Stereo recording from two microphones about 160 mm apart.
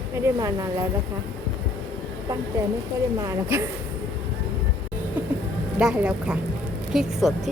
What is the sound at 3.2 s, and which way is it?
Speech, 15° right (ahead or behind).